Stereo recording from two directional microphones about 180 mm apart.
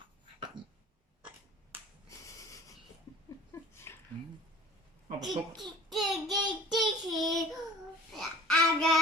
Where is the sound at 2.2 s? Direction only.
15° left (ahead or behind).